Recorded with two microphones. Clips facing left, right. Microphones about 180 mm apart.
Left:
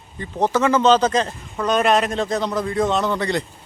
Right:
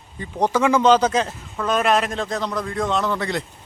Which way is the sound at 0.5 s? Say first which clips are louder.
Even; 10° right (ahead or behind).